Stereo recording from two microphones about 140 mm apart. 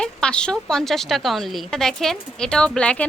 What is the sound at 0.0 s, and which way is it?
A woman's voice, 5° left (ahead or behind).